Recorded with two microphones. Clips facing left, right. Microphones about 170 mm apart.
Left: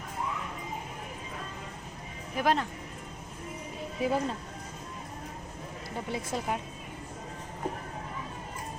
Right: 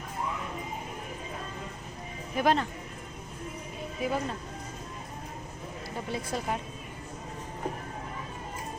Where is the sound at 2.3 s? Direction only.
5° left (ahead or behind).